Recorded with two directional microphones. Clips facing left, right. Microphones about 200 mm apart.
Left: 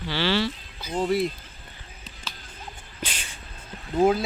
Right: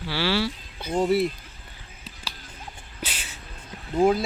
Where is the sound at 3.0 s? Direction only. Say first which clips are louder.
Even; 5° right (ahead or behind).